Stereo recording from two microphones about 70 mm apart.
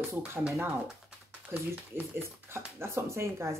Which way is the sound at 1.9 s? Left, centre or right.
Right.